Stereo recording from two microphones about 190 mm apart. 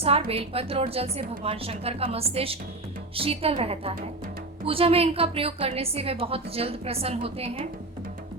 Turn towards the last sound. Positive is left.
turn(degrees=-30)  # may be behind; listen again after turning